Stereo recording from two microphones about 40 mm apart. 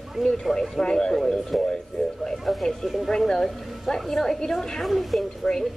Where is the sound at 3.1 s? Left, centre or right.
Centre.